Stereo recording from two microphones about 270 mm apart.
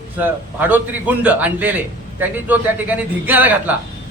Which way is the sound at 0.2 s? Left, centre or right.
Centre.